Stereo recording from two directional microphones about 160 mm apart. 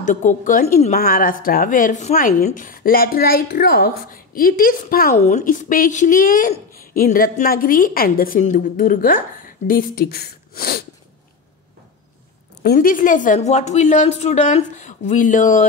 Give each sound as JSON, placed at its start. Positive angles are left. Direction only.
{"t": 0.0, "sound": "a woman's voice", "side_deg": 50}
{"t": 0.9, "sound": "speech", "side_deg": 65}
{"t": 12.6, "sound": "a woman's voice", "side_deg": 60}